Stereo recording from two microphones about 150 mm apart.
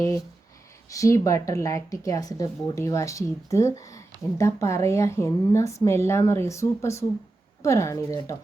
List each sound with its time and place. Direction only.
0.9 s a woman's voice: 20° left (ahead or behind)